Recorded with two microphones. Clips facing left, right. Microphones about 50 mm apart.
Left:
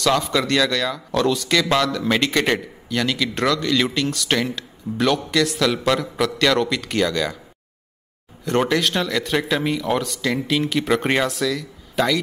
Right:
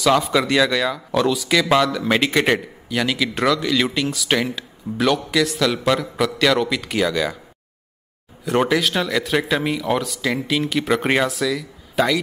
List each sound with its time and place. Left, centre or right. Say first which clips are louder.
0.0 s speech: right 2 dB; centre
8.5 s speech: right 1 dB; centre